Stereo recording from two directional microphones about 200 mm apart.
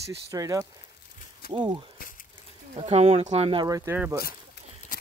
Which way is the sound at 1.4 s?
50° left (ahead or behind).